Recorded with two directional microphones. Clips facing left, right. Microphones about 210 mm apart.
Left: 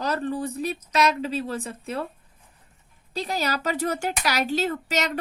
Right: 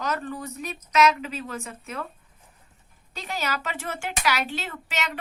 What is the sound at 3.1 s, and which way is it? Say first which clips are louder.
Speech: left 4 dB; 35° left (ahead or behind).